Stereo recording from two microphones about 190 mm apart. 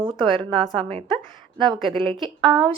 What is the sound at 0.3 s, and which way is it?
A woman's voice, 30° right (ahead or behind).